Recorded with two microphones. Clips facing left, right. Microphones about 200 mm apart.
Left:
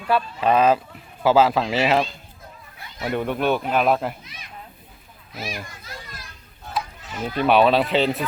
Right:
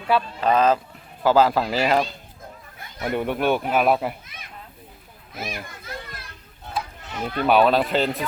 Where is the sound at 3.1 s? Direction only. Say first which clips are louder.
Even; 10° right (ahead or behind).